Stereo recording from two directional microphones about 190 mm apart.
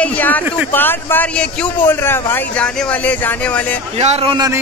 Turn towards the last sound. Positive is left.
turn(degrees=-20)  # may be behind; listen again after turning